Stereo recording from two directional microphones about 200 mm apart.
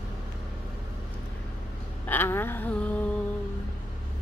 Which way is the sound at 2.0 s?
10° left (ahead or behind).